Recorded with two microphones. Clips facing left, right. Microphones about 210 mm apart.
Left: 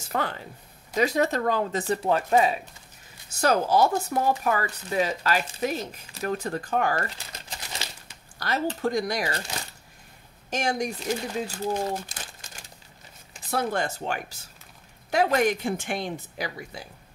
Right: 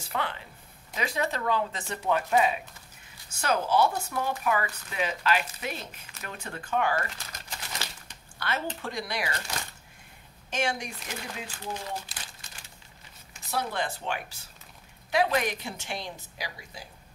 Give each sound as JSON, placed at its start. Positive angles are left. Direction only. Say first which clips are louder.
{"t": 0.1, "sound": "speech", "louder": "left 4 dB", "side_deg": 40}
{"t": 10.5, "sound": "speech", "louder": "left 4 dB", "side_deg": 40}